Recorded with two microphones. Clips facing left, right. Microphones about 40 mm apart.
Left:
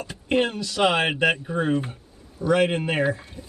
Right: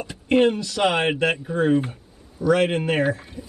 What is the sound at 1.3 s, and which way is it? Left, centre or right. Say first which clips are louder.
Speech: right 3 dB; centre.